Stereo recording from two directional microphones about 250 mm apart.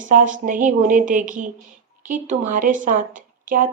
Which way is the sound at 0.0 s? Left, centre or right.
Right.